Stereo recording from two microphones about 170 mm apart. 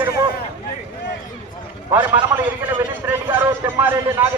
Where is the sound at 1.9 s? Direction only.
10° right (ahead or behind).